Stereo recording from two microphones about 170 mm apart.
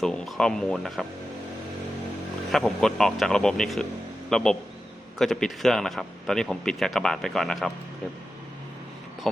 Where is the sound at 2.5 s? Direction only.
Centre (ahead or behind).